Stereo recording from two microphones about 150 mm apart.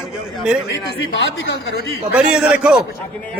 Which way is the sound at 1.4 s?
90° left.